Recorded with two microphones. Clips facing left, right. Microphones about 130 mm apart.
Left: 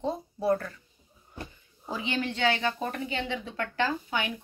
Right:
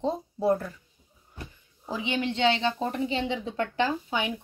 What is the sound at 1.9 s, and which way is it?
A woman's voice, 15° right (ahead or behind).